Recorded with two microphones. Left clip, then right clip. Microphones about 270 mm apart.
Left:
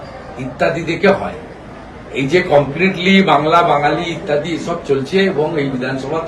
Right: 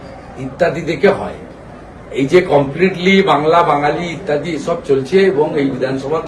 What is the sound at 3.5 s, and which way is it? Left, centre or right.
Speech, right.